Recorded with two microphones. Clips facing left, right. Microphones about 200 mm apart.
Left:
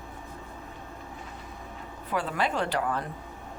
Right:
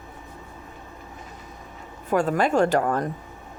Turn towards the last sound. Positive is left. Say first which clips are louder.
# right 8 dB
turn(degrees=-45)  # may be behind; listen again after turning